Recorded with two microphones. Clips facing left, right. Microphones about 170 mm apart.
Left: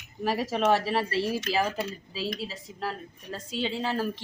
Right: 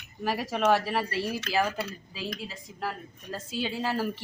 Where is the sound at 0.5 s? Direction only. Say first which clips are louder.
Even; 30° left (ahead or behind).